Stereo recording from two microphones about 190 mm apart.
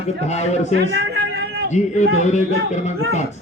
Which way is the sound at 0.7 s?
65° right (ahead or behind).